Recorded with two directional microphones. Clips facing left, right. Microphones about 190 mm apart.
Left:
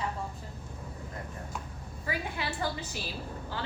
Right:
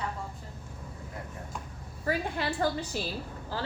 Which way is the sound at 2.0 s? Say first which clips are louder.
Right 5 dB; 50° right (ahead or behind).